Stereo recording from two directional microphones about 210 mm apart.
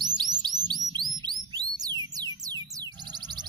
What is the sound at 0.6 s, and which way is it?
Music, 20° right (ahead or behind).